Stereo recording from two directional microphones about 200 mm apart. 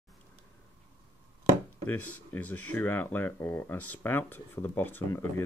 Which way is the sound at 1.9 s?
10° left (ahead or behind).